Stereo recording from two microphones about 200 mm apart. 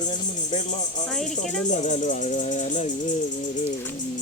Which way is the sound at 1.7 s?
35° left (ahead or behind).